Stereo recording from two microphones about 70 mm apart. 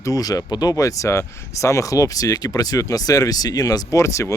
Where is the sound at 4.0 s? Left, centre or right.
Left.